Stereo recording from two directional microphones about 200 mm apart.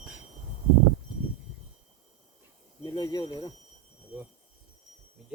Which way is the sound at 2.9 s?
20° left (ahead or behind).